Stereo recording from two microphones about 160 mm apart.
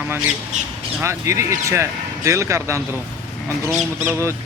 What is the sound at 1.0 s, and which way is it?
Speech, 20° right (ahead or behind).